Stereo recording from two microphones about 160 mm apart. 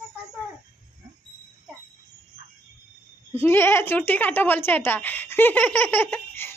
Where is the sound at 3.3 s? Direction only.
15° left (ahead or behind).